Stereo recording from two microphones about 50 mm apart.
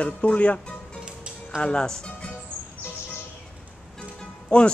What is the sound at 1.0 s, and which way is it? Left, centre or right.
Music, centre.